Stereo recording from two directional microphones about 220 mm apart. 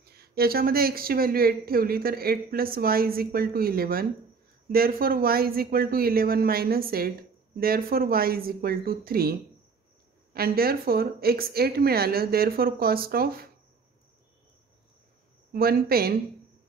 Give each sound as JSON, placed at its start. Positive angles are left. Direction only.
{"t": 0.0, "sound": "speech", "side_deg": -45}
{"t": 15.5, "sound": "speech", "side_deg": -45}